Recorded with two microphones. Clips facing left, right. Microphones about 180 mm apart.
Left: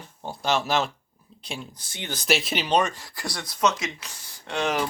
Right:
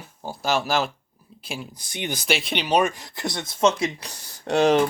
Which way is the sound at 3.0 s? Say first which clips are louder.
Right 4 dB; 20° right (ahead or behind).